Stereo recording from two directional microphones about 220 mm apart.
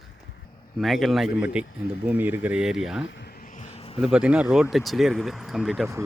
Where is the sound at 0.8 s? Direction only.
Centre (ahead or behind).